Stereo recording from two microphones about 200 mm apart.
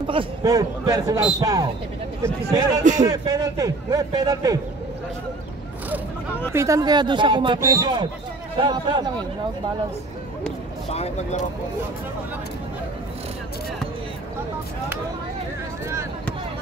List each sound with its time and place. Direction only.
0.0 s a man's voice: 25° right (ahead or behind)
2.8 s speech: 40° right (ahead or behind)
3.1 s a man's voice: 20° right (ahead or behind)
6.5 s speech: 15° right (ahead or behind)
10.9 s speech: 30° left (ahead or behind)